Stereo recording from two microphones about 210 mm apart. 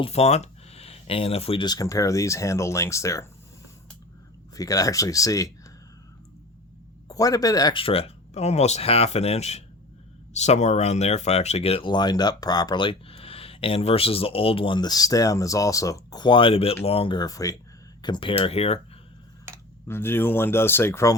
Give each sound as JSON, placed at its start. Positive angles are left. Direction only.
{"t": 0.0, "sound": "speech", "side_deg": 30}
{"t": 4.5, "sound": "speech", "side_deg": 15}
{"t": 7.1, "sound": "speech", "side_deg": 15}
{"t": 19.9, "sound": "speech", "side_deg": 10}